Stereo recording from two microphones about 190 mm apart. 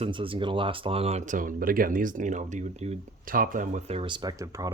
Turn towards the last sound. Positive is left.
turn(degrees=-15)  # may be behind; listen again after turning